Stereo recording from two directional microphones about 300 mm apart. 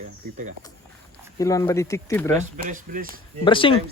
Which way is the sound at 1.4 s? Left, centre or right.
Centre.